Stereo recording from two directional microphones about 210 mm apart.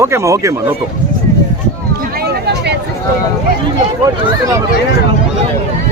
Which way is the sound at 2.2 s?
50° right (ahead or behind).